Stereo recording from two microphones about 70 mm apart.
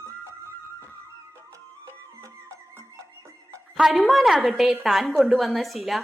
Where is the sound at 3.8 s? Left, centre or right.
Centre.